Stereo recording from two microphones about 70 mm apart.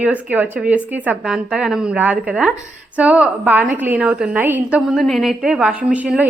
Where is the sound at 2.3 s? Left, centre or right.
Centre; by 4.6 s right.